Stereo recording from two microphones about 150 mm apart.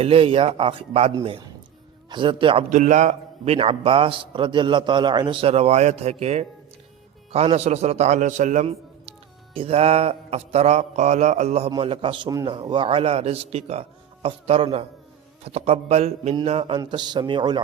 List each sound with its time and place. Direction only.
0.0 s a man's voice: 40° right (ahead or behind)
2.6 s a man's voice: 55° right (ahead or behind)
8.6 s a sound: 40° right (ahead or behind)
9.6 s a man's voice: 40° right (ahead or behind)
16.8 s a man's voice: 30° right (ahead or behind)